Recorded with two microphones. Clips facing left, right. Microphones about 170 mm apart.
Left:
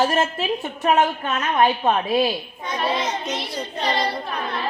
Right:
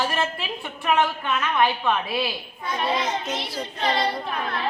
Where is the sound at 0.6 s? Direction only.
40° left (ahead or behind).